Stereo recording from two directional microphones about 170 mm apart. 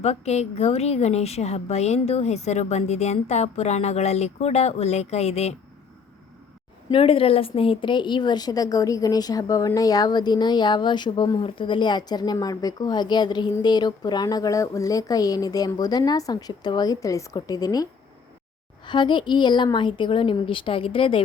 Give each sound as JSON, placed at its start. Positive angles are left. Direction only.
{"t": 0.0, "sound": "a woman's voice", "side_deg": 40}
{"t": 6.9, "sound": "a woman's voice", "side_deg": 35}
{"t": 18.9, "sound": "a woman's voice", "side_deg": 30}